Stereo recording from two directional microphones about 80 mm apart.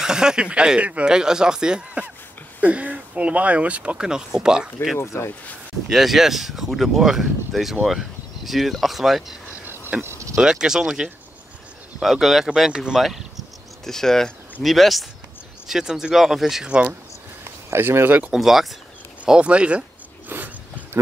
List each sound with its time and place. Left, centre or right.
0.0 s speech: centre
4.9 s speech: left
5.9 s speech: centre
10.0 s cricket: right
10.3 s speech: centre
17.6 s speech: right
18.3 s speech: centre
20.2 s a sound: right